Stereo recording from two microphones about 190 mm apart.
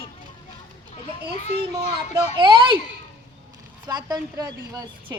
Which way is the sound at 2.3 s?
25° right (ahead or behind).